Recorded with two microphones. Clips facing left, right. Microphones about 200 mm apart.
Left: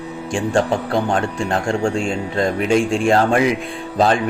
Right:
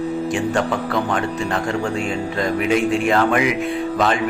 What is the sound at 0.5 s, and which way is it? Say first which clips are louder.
A man's voice: left 2 dB; 30° left (ahead or behind).